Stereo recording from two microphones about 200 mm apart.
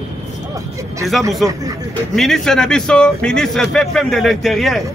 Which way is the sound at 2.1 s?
Centre (ahead or behind).